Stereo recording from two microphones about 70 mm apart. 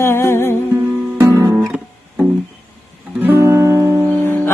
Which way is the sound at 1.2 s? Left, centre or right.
Right.